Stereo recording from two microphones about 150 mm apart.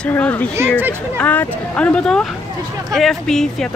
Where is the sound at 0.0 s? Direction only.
10° left (ahead or behind).